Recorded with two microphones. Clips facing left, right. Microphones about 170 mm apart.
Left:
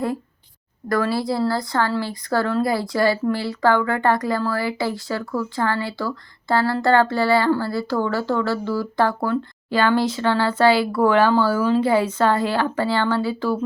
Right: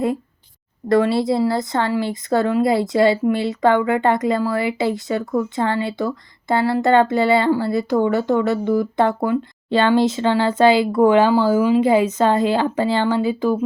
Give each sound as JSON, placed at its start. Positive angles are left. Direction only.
{"t": 0.9, "sound": "speech", "side_deg": -25}